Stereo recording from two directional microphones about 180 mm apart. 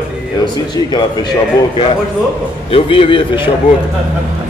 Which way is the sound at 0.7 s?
25° left (ahead or behind).